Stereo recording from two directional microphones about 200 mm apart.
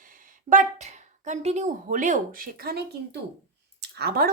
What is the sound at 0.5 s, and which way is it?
A woman's voice, 35° right (ahead or behind).